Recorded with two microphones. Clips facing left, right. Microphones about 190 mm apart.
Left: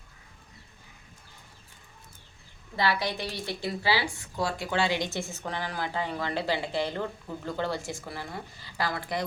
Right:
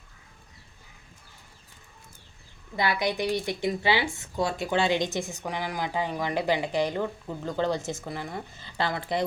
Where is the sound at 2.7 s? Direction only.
15° right (ahead or behind).